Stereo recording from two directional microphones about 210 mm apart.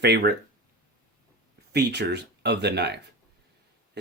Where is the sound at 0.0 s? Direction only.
50° right (ahead or behind).